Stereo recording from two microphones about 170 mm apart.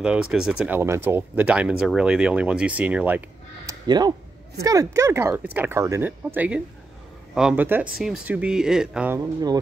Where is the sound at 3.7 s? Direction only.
25° right (ahead or behind).